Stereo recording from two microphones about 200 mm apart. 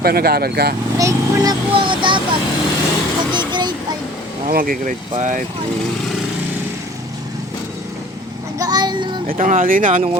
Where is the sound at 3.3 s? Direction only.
20° right (ahead or behind).